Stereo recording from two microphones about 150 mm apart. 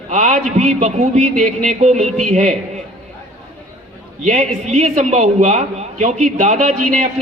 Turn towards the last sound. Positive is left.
turn(degrees=-55)  # may be behind; listen again after turning